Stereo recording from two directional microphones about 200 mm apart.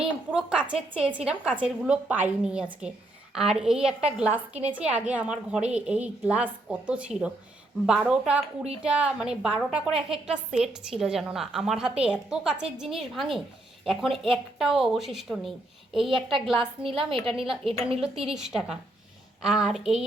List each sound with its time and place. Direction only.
0.0 s a woman's voice: 5° right (ahead or behind)
16.8 s a woman's voice: 25° right (ahead or behind)
18.3 s a woman's voice: 5° right (ahead or behind)